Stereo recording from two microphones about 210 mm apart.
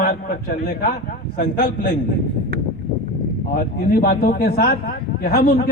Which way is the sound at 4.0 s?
45° left (ahead or behind).